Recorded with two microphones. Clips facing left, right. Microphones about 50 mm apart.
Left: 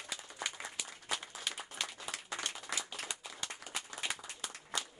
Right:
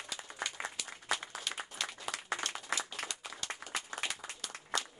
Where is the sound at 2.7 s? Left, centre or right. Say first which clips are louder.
Right 5 dB; right.